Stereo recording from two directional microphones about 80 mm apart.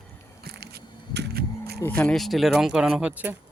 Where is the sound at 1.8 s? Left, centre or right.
Centre.